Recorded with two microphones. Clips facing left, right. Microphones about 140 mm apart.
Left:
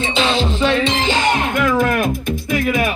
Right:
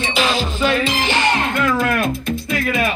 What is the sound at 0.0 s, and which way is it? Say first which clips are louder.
Music: left 2 dB; 25° left (ahead or behind).